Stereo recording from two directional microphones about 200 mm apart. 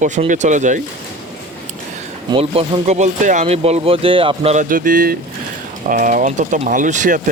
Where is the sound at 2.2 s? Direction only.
25° right (ahead or behind).